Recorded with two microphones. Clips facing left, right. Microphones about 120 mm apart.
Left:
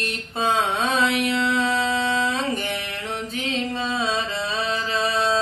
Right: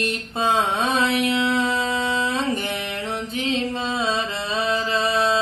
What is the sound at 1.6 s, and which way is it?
Music, centre (ahead or behind).